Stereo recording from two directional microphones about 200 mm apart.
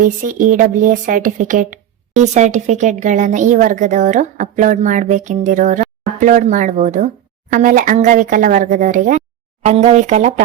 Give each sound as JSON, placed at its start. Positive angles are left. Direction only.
{"t": 0.0, "sound": "speech", "side_deg": -40}